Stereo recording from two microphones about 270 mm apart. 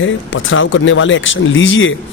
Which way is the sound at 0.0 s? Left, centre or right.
Left.